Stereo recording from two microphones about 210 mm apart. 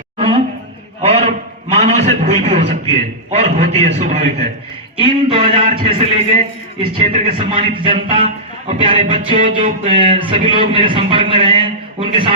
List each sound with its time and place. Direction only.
1.0 s a sound: 30° right (ahead or behind)
2.9 s a man's voice: 30° right (ahead or behind)
9.1 s music: 35° right (ahead or behind)
9.6 s a man's voice: 25° right (ahead or behind)